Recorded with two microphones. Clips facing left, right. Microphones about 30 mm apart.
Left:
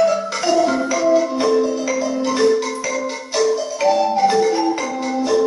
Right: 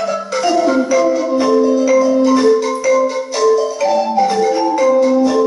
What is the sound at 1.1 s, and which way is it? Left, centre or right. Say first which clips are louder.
Music: right 1 dB; centre.